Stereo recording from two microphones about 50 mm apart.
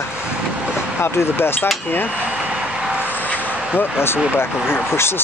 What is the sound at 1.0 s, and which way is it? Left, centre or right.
Speech, left.